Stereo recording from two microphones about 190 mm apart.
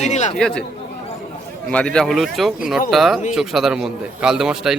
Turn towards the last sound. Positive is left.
turn(degrees=0)  # may be behind; listen again after turning